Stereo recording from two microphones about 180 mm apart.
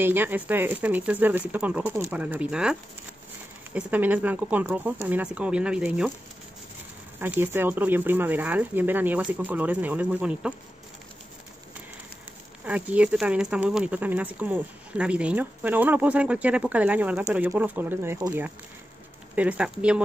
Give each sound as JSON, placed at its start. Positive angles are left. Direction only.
{"t": 0.0, "sound": "speech", "side_deg": -10}
{"t": 7.2, "sound": "speech", "side_deg": -10}
{"t": 12.6, "sound": "speech", "side_deg": -5}